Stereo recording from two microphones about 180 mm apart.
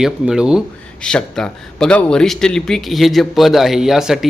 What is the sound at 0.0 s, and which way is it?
Speech, 5° right (ahead or behind).